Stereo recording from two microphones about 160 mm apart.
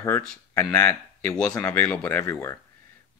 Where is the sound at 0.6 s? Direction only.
15° left (ahead or behind).